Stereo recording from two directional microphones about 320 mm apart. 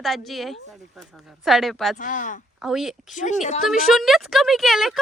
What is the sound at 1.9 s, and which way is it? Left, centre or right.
Speech, left.